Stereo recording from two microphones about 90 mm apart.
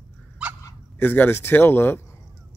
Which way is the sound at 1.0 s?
20° left (ahead or behind).